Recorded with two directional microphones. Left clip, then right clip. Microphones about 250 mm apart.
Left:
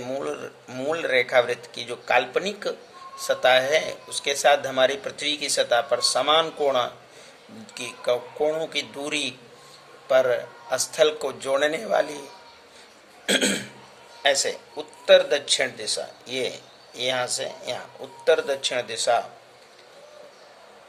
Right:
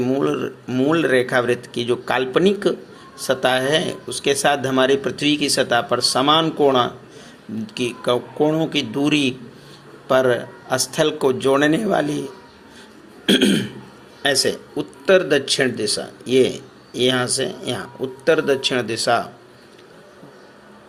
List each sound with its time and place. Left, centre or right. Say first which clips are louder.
0.0 s speech: right 9 dB; centre
13.2 s speech: right 6 dB; centre